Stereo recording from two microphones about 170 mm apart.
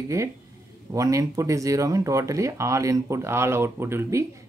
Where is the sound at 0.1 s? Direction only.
20° right (ahead or behind).